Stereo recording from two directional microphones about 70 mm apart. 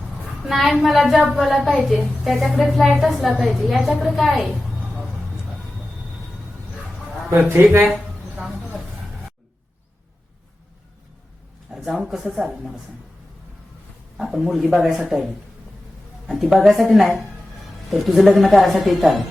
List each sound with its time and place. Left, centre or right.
0.4 s a woman's voice: centre
7.3 s a man's voice: right
11.9 s speech: centre
14.2 s a woman's voice: centre